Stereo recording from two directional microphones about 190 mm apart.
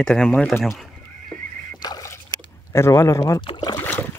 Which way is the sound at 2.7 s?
15° left (ahead or behind).